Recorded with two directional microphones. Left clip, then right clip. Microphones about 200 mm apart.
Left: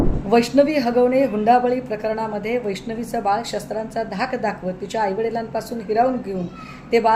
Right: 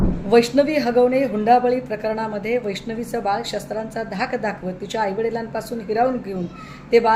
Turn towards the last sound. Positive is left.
turn(degrees=-5)  # may be behind; listen again after turning